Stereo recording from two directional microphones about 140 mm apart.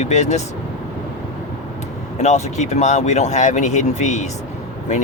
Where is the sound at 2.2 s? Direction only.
55° left (ahead or behind).